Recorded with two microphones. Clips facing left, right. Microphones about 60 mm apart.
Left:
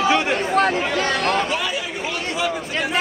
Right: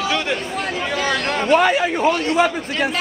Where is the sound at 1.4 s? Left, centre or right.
Right.